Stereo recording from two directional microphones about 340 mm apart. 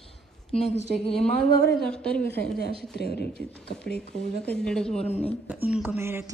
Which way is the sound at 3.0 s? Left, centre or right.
Left.